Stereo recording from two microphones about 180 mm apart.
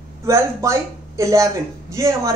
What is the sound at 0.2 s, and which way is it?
A woman's voice, 15° right (ahead or behind).